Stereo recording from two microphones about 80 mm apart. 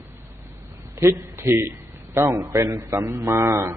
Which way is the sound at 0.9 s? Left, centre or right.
Right.